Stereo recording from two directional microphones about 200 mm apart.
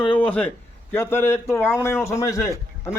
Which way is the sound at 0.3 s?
5° left (ahead or behind).